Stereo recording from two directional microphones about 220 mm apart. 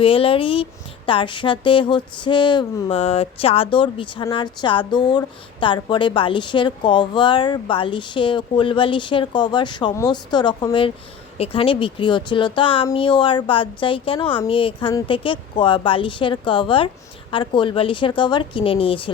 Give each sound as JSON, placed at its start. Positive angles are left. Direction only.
{"t": 0.0, "sound": "a woman's voice", "side_deg": 25}